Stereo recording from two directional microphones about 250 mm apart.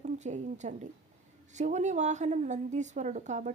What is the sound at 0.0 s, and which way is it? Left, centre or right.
A woman's voice, right.